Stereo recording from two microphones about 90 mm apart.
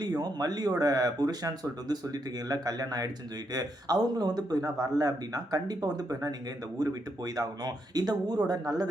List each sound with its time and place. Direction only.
0.0 s speech: 45° right (ahead or behind)